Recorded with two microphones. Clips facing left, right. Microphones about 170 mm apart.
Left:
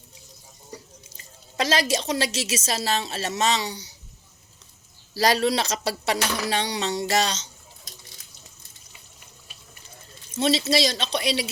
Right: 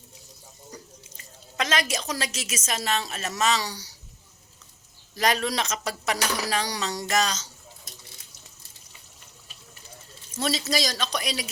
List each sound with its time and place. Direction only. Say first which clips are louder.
1.1 s a woman's voice: left 3 dB; 30° left (ahead or behind)
5.1 s a woman's voice: left 4 dB; 35° left (ahead or behind)
10.3 s speech: left 5 dB; 30° left (ahead or behind)